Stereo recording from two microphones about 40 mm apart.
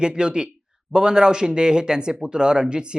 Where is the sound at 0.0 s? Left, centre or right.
Right.